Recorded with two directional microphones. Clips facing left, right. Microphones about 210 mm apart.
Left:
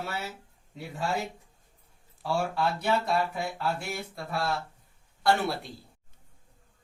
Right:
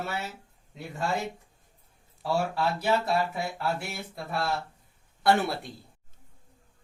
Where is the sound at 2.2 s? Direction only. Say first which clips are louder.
Right 1 dB; centre (ahead or behind).